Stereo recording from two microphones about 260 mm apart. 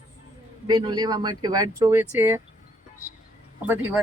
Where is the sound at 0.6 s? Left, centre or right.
Centre.